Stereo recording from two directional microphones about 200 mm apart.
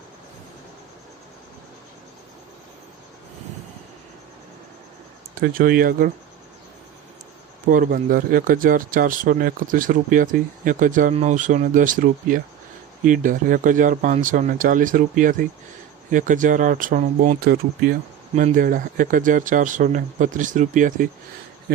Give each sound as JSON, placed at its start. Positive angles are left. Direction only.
{"t": 5.4, "sound": "speech", "side_deg": -45}
{"t": 7.7, "sound": "speech", "side_deg": -45}